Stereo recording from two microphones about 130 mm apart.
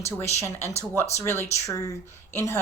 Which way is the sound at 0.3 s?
20° left (ahead or behind).